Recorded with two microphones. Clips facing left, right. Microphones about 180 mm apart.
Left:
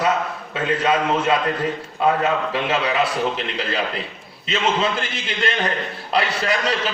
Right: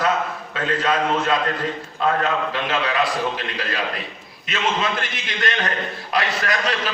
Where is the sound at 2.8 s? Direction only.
25° left (ahead or behind).